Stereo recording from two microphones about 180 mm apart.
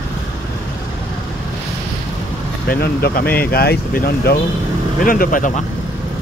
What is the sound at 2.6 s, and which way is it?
Speech, 55° left (ahead or behind).